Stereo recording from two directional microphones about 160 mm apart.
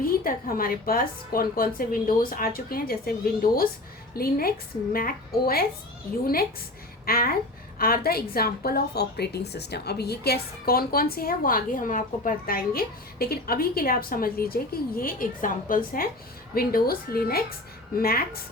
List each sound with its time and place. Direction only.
0.0 s a woman's voice: 65° left (ahead or behind)
4.1 s a woman's voice: 70° left (ahead or behind)